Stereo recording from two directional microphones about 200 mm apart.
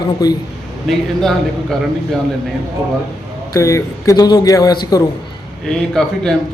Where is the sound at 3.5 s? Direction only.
15° left (ahead or behind).